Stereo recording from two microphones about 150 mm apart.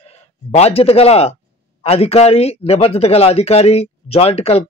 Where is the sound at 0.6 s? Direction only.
40° left (ahead or behind).